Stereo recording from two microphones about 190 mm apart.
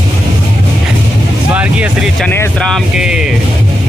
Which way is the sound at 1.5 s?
10° right (ahead or behind).